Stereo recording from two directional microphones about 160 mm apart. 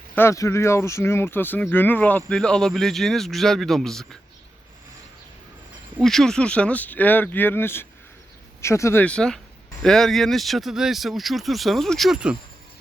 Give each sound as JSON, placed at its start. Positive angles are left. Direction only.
{"t": 0.2, "sound": "speech", "side_deg": 20}
{"t": 6.0, "sound": "speech", "side_deg": 0}